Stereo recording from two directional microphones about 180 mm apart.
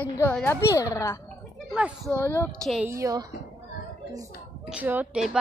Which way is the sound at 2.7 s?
5° right (ahead or behind).